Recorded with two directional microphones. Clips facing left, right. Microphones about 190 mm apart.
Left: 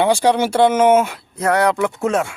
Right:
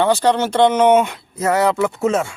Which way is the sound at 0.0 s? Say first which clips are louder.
Left 1 dB; 10° left (ahead or behind).